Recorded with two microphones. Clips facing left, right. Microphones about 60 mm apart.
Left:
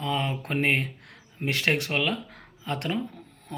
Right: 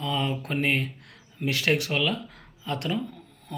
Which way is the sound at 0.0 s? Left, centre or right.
Left.